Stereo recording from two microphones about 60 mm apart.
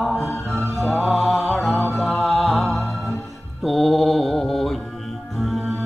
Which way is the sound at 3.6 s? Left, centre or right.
Centre.